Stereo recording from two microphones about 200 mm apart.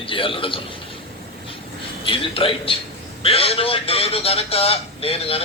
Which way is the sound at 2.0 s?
25° left (ahead or behind).